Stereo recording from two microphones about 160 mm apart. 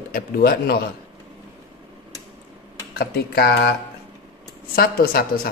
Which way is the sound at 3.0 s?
75° left (ahead or behind).